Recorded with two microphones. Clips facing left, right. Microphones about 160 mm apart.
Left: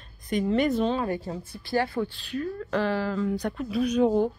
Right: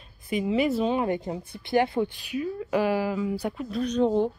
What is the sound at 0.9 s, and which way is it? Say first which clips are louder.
Speech: right 2 dB; 20° right (ahead or behind).